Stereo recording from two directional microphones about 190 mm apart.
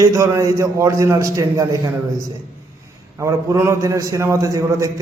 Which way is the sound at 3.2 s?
15° right (ahead or behind).